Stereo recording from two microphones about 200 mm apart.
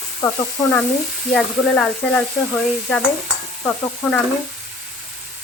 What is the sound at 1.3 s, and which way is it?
Speech, centre (ahead or behind).